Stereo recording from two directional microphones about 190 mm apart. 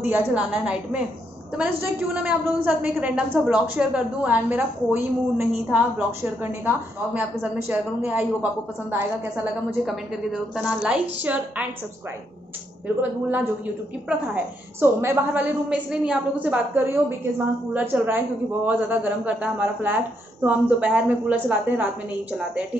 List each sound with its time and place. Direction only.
0.0 s a woman's voice: 10° right (ahead or behind)
9.8 s a woman's voice: 5° right (ahead or behind)
12.8 s a woman's voice: 10° right (ahead or behind)